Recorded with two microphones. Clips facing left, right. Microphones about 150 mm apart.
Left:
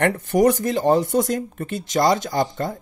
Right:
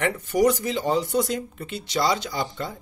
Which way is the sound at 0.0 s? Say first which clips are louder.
Left 4 dB; 50° left (ahead or behind).